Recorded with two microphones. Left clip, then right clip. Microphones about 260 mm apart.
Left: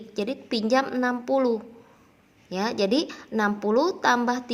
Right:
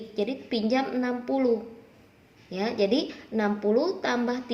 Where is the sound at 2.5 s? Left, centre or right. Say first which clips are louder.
Left 1 dB; left.